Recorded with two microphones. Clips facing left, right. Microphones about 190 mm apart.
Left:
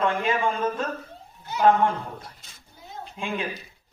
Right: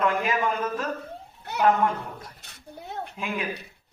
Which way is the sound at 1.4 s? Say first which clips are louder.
Left 2 dB; 65° right (ahead or behind).